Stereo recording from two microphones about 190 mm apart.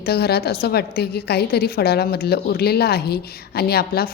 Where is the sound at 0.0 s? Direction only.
55° left (ahead or behind).